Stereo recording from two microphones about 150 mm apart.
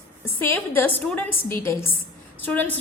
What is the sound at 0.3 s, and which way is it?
A woman's voice, 15° left (ahead or behind).